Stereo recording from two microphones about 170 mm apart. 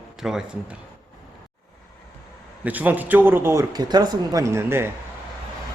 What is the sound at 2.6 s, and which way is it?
A man's voice, 10° right (ahead or behind).